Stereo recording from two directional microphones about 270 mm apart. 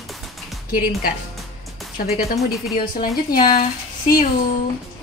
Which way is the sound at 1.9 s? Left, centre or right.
Left.